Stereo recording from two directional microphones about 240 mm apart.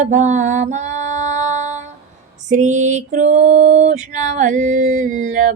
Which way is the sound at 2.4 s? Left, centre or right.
Right.